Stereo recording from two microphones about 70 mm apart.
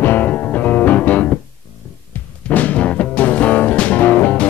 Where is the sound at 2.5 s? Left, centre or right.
Left.